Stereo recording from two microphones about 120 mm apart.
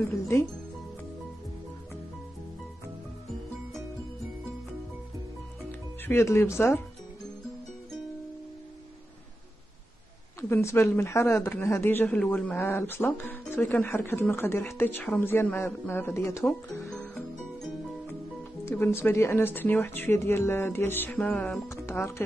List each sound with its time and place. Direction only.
6.0 s speech: 20° left (ahead or behind)
10.5 s speech: 25° left (ahead or behind)
16.4 s music: 5° left (ahead or behind)
18.7 s speech: 20° left (ahead or behind)
21.6 s music: 20° left (ahead or behind)